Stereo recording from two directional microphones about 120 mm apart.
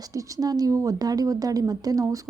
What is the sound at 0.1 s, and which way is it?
A woman's voice, 30° right (ahead or behind).